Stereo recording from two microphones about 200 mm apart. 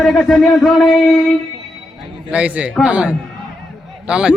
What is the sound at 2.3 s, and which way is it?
A man's voice, 5° right (ahead or behind).